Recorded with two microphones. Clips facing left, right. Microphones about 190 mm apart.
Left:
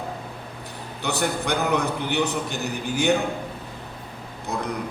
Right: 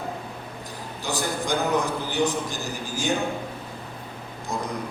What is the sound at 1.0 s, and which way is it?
A man's voice, 65° left (ahead or behind).